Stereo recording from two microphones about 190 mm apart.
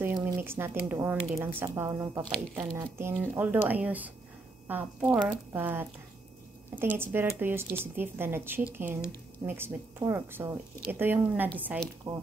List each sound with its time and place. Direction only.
0.0 s speech: 10° right (ahead or behind)